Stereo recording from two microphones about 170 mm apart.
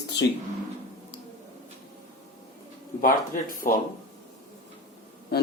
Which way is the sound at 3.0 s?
55° left (ahead or behind).